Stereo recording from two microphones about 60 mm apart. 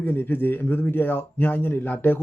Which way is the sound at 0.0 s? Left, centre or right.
Left.